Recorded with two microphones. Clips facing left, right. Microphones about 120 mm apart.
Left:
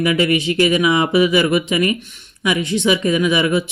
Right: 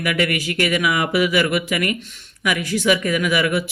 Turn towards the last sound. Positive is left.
turn(degrees=25)  # may be behind; listen again after turning